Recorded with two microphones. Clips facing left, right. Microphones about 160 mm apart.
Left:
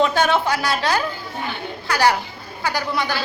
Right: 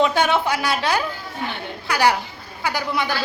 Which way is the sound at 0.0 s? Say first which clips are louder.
Even; 15° right (ahead or behind).